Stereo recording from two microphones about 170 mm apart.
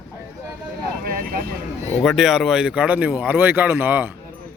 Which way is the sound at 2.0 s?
Centre (ahead or behind).